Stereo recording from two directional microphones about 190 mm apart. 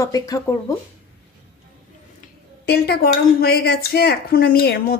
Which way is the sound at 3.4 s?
55° left (ahead or behind).